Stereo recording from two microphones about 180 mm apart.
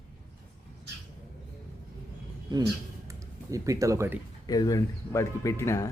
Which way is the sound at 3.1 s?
15° right (ahead or behind).